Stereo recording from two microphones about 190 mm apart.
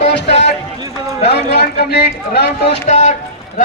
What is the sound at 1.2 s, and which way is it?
A man's voice, 60° left (ahead or behind).